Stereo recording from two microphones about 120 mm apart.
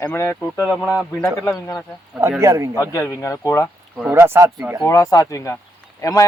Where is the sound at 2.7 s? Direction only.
25° left (ahead or behind).